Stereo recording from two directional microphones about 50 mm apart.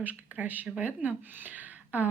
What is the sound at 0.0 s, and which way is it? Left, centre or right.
Speech, right.